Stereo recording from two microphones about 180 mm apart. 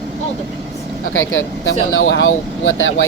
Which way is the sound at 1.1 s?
90° left.